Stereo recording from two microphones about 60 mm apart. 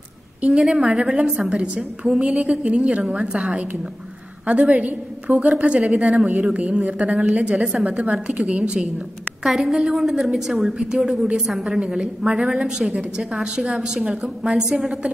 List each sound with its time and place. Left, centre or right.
0.5 s a woman's voice: centre
9.4 s a woman's voice: centre